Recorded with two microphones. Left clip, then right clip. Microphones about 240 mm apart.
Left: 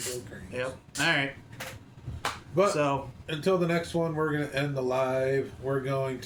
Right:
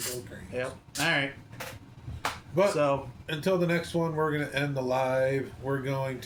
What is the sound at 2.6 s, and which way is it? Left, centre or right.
Speech, centre.